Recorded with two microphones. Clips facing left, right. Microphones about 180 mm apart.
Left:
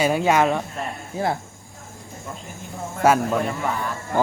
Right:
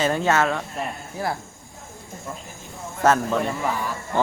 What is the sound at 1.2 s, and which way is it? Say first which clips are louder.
Speech: left 4 dB; 25° left (ahead or behind).